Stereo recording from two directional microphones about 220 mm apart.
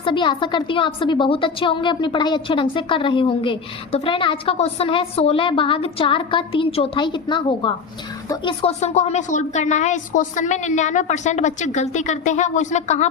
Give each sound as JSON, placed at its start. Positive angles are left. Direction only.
{"t": 0.0, "sound": "a woman's voice", "side_deg": 20}